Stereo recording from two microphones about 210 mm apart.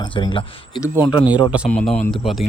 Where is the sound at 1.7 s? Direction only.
5° left (ahead or behind).